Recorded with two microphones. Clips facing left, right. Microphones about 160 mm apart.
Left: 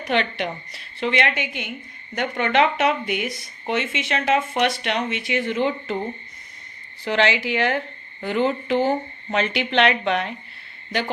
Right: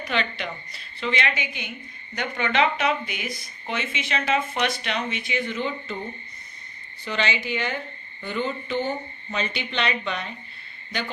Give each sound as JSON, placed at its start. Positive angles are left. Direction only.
{"t": 0.1, "sound": "speech", "side_deg": 60}
{"t": 2.3, "sound": "speech", "side_deg": 55}
{"t": 7.0, "sound": "speech", "side_deg": 85}